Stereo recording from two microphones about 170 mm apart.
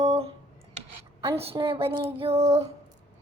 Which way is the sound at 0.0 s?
35° right (ahead or behind).